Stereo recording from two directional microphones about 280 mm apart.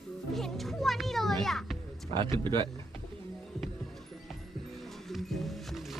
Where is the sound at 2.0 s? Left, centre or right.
Centre.